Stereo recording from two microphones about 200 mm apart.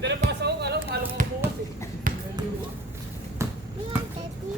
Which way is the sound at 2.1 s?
40° right (ahead or behind).